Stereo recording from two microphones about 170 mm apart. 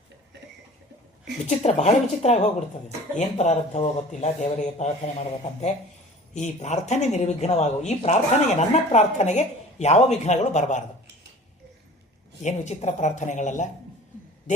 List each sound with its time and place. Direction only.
1.5 s speech: 40° left (ahead or behind)
6.3 s speech: 45° left (ahead or behind)
12.4 s speech: 45° left (ahead or behind)